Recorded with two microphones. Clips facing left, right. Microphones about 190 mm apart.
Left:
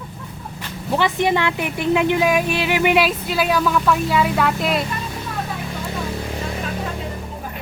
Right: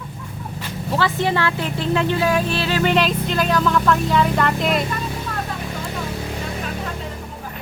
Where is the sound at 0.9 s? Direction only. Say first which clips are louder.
Left 2 dB; 15° left (ahead or behind).